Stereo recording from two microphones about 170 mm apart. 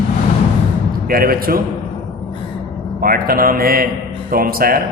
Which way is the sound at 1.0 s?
60° right (ahead or behind).